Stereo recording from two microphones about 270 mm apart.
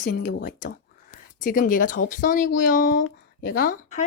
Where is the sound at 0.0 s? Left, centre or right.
Left.